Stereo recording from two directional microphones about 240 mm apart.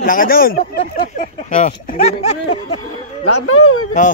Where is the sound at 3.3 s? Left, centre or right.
Left.